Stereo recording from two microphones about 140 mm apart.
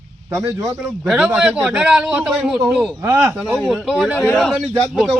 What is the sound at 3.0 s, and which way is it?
Speech, 20° right (ahead or behind).